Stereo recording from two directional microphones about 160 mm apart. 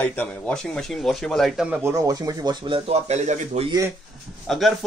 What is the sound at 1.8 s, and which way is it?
Speech, 20° right (ahead or behind).